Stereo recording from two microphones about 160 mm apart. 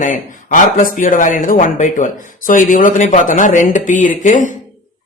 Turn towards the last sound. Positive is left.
turn(degrees=50)  # may be behind; listen again after turning